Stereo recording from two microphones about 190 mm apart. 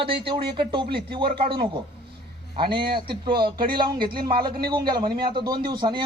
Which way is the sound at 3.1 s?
25° right (ahead or behind).